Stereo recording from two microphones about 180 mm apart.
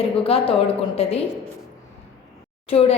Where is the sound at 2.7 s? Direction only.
35° left (ahead or behind).